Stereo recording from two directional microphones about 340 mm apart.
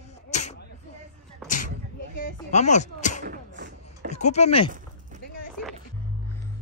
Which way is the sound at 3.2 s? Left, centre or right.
Right.